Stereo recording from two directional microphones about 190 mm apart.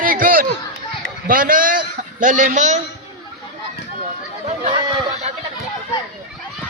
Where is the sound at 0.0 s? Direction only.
45° right (ahead or behind).